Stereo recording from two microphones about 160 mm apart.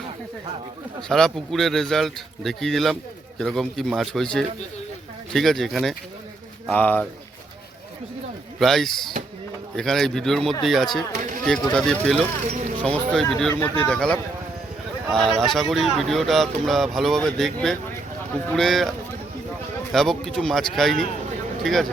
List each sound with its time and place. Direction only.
1.0 s speech: 5° left (ahead or behind)
6.7 s speech: 10° left (ahead or behind)
8.5 s speech: centre (ahead or behind)
12.5 s speech: 50° right (ahead or behind)
12.9 s speech: centre (ahead or behind)